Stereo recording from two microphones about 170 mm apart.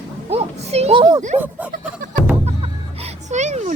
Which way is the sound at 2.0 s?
50° right (ahead or behind).